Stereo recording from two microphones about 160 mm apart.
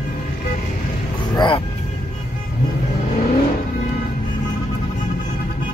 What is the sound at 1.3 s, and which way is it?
Music, 30° left (ahead or behind).